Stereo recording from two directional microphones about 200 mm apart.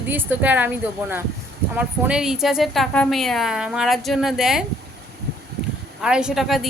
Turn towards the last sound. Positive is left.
turn(degrees=0)  # may be behind; listen again after turning